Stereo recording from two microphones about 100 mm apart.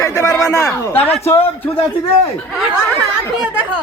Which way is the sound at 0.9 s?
20° left (ahead or behind).